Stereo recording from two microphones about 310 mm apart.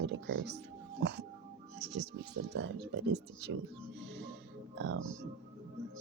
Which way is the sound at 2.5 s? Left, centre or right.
Right.